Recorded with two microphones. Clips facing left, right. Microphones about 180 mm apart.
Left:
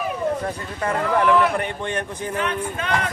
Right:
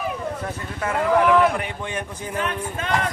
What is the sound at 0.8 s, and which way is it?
Speech, 5° right (ahead or behind).